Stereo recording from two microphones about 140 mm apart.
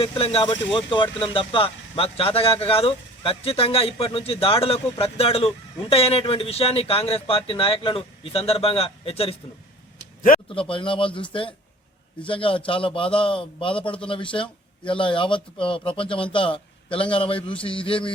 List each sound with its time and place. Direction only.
0.0 s speech: 45° left (ahead or behind)
10.5 s a man's voice: 40° left (ahead or behind)